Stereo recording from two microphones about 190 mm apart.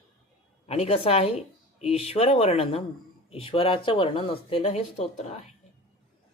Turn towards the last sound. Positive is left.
turn(degrees=35)  # may be behind; listen again after turning